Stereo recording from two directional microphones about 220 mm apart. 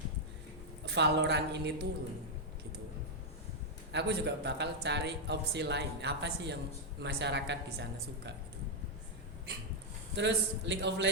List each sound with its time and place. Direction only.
0.9 s a man's voice: 50° right (ahead or behind)
3.9 s a man's voice: 50° right (ahead or behind)
10.2 s a man's voice: 55° right (ahead or behind)